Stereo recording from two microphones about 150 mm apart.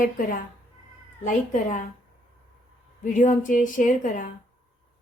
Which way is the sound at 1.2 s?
55° left (ahead or behind).